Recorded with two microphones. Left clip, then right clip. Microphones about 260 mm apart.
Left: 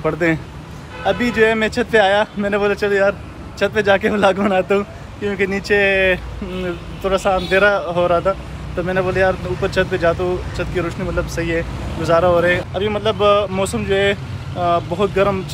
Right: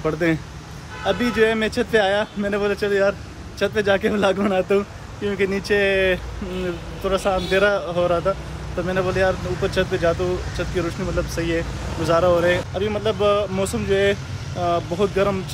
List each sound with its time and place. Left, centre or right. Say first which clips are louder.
0.0 s speech: left 3 dB; centre